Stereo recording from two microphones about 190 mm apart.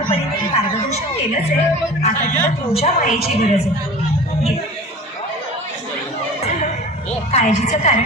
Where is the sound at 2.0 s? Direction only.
40° left (ahead or behind).